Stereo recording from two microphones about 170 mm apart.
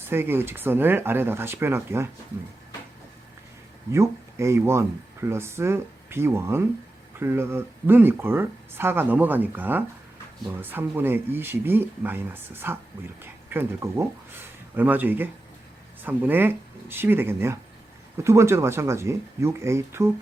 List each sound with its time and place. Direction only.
0.0 s speech: 15° right (ahead or behind)
3.9 s speech: 15° right (ahead or behind)